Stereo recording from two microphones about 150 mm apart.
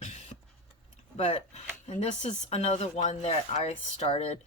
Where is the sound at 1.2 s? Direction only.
45° left (ahead or behind).